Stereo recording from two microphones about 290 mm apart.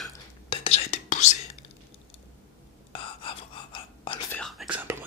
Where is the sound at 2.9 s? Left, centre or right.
Centre.